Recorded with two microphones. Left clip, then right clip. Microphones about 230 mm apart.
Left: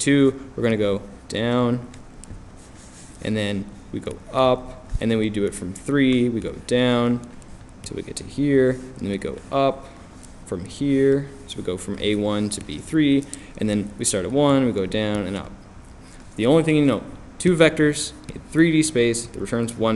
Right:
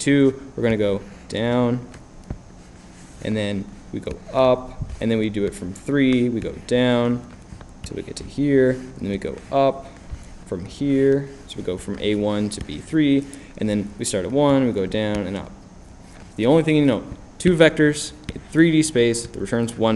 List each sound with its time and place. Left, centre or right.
0.0 s speech: centre
3.2 s a man's voice: centre